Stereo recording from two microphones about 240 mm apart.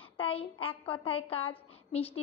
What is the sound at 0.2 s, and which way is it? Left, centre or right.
A woman's voice, left.